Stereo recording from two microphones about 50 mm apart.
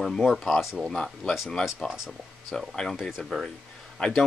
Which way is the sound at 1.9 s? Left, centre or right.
Centre.